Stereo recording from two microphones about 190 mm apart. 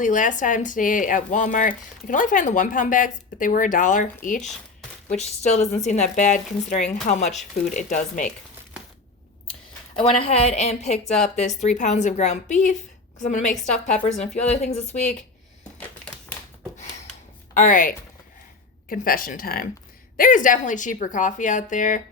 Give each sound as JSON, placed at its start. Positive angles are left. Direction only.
{"t": 0.0, "sound": "a woman's voice", "side_deg": 40}
{"t": 9.9, "sound": "a woman's voice", "side_deg": 30}
{"t": 17.5, "sound": "speech", "side_deg": 45}